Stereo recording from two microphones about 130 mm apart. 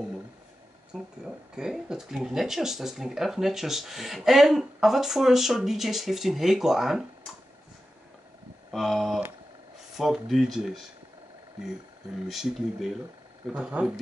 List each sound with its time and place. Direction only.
0.9 s speech: 5° right (ahead or behind)
8.7 s speech: centre (ahead or behind)
12.3 s speech: centre (ahead or behind)